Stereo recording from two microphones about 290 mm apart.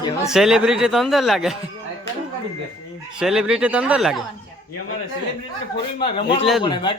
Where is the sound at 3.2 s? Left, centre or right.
Centre.